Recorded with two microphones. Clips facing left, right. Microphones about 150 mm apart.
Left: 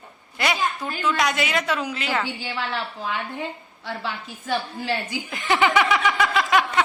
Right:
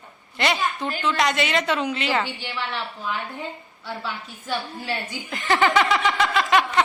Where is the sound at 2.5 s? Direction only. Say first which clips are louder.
Left 2 dB; 30° left (ahead or behind).